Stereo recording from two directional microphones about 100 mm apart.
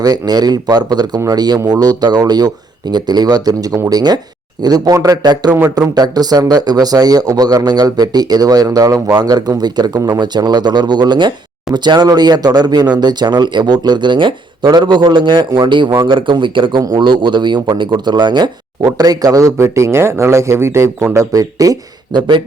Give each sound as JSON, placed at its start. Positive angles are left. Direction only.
{"t": 0.0, "sound": "a man's voice", "side_deg": -40}
{"t": 5.5, "sound": "speech", "side_deg": -20}
{"t": 5.9, "sound": "a man's voice", "side_deg": -40}